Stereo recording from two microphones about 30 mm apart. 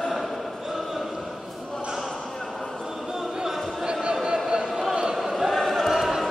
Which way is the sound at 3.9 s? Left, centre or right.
Right.